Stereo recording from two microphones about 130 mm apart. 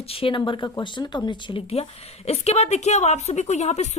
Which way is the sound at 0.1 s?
45° left (ahead or behind).